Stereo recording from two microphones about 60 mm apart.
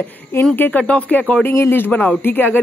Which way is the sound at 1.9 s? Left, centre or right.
Left.